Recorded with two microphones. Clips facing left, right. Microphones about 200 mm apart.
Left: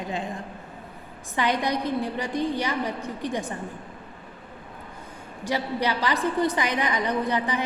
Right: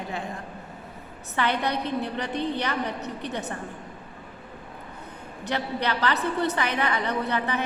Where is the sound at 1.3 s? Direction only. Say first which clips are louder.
Left 1 dB; 15° left (ahead or behind).